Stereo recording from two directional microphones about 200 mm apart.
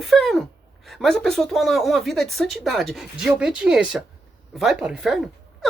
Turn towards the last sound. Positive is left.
turn(degrees=0)  # may be behind; listen again after turning